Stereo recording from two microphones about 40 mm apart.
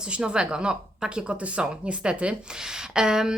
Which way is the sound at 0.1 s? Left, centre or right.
Right.